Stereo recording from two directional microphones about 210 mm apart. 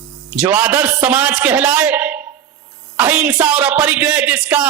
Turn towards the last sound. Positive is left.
turn(degrees=-5)  # may be behind; listen again after turning